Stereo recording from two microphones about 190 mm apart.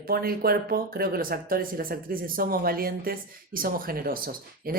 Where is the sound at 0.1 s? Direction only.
50° right (ahead or behind).